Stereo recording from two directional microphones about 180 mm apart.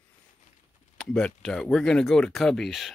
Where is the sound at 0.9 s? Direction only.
5° left (ahead or behind).